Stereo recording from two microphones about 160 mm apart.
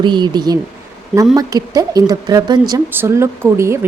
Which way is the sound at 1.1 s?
Centre (ahead or behind).